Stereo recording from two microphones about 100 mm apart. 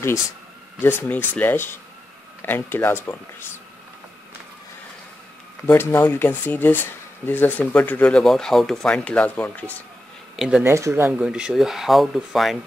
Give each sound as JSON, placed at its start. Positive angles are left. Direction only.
{"t": 0.7, "sound": "speech", "side_deg": 20}
{"t": 5.7, "sound": "speech", "side_deg": 20}
{"t": 10.3, "sound": "speech", "side_deg": -5}
{"t": 10.6, "sound": "speech", "side_deg": -25}
{"t": 11.1, "sound": "speech", "side_deg": -10}